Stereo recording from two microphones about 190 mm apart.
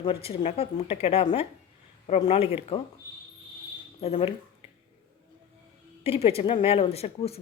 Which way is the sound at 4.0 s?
30° left (ahead or behind).